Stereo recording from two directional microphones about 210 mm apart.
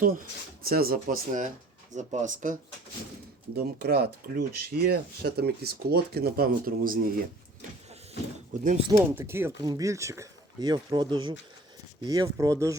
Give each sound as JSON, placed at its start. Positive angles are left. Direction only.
{"t": 0.0, "sound": "speech", "side_deg": -40}
{"t": 3.5, "sound": "speech", "side_deg": -50}
{"t": 8.5, "sound": "speech", "side_deg": -40}
{"t": 8.9, "sound": "speech", "side_deg": -10}